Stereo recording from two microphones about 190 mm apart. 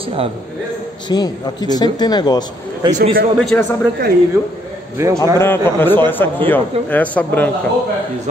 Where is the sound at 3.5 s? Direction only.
10° left (ahead or behind).